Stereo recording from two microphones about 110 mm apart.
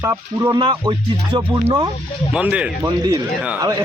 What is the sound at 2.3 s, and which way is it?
Speech, 10° right (ahead or behind).